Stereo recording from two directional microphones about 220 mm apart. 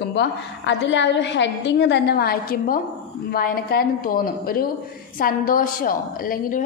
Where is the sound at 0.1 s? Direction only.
55° left (ahead or behind).